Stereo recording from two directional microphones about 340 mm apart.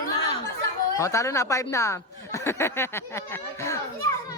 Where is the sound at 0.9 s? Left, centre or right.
Centre.